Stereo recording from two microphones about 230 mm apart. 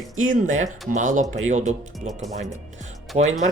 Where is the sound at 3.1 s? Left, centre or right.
Right.